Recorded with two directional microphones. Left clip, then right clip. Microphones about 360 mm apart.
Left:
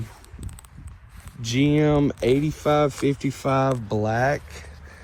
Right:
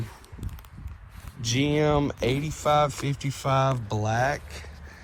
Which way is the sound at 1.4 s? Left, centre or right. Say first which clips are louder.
Left 3 dB; right.